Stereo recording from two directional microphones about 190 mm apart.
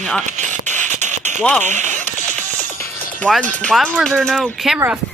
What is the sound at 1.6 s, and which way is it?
Speech, 40° right (ahead or behind).